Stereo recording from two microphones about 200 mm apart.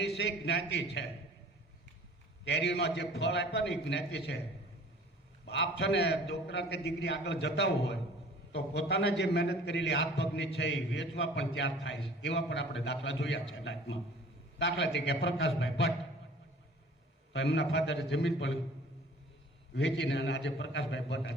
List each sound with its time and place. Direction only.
0.0 s a man's voice: 60° left (ahead or behind)
2.4 s a man's voice: 60° left (ahead or behind)
5.5 s a man's voice: 60° left (ahead or behind)
14.6 s a man's voice: 60° left (ahead or behind)
17.3 s a man's voice: 60° left (ahead or behind)
19.7 s a man's voice: 60° left (ahead or behind)